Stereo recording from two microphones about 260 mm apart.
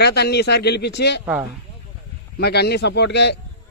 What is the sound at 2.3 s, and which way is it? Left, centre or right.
A man's voice, left.